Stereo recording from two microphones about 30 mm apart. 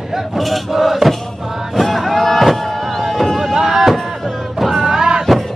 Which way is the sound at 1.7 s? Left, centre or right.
Centre.